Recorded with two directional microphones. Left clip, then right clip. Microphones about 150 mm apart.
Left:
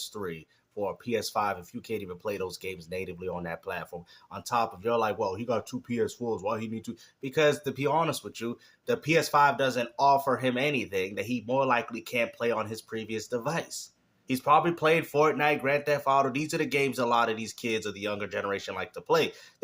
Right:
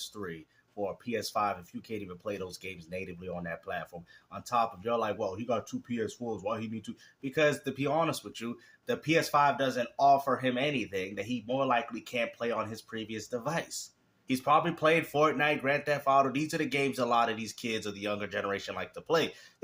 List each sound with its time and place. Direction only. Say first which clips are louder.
0.1 s speech: left 4 dB; 35° left (ahead or behind)